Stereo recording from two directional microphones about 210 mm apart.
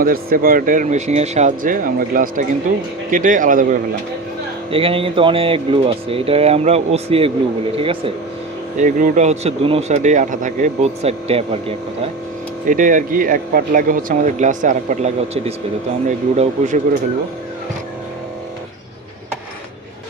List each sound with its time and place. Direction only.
0.0 s speech: 45° right (ahead or behind)
4.7 s speech: 25° right (ahead or behind)
8.8 s speech: 40° right (ahead or behind)
12.6 s speech: 40° right (ahead or behind)